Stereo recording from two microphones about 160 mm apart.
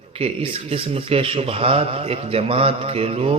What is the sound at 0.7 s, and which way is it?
A man's voice, 35° right (ahead or behind).